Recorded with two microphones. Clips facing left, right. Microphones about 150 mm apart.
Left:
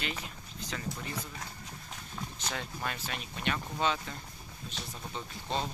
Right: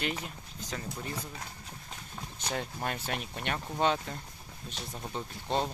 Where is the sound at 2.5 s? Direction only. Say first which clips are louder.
Right 4 dB; 40° right (ahead or behind).